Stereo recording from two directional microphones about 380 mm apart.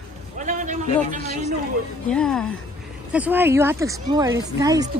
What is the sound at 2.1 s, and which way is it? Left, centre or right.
A woman's voice, centre.